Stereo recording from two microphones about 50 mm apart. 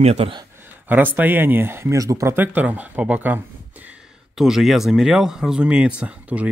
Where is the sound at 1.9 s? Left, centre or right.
Right.